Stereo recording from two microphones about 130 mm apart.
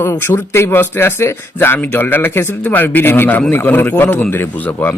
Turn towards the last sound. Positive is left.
turn(degrees=10)  # may be behind; listen again after turning